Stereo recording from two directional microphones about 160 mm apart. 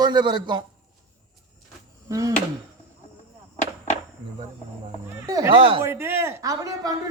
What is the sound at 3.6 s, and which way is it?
Chop, 50° left (ahead or behind).